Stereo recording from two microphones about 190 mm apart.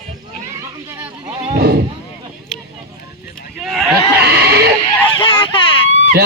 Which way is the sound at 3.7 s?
Centre (ahead or behind).